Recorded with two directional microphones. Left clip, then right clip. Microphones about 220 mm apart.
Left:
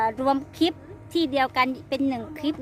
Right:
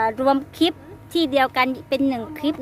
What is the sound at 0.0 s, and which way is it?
A woman's voice, 15° right (ahead or behind).